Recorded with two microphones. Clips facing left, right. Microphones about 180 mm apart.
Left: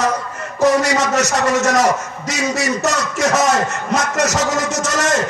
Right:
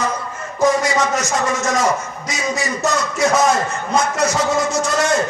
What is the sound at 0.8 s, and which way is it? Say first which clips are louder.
A man's voice: left 2 dB; 75° left (ahead or behind).